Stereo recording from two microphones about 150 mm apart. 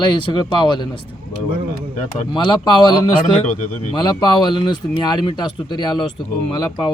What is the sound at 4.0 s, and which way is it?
Speech, 30° left (ahead or behind).